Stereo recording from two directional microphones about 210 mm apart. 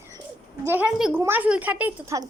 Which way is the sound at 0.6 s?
10° right (ahead or behind).